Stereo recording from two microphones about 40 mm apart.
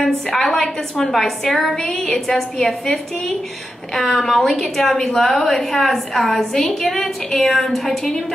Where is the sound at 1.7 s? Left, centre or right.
Centre.